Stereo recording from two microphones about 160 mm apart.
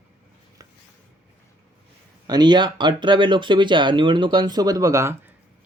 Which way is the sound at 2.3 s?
25° right (ahead or behind).